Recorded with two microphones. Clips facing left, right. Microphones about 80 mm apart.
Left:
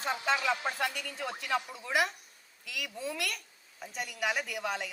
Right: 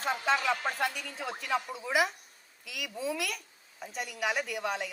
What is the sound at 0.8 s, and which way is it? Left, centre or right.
A woman's voice, centre.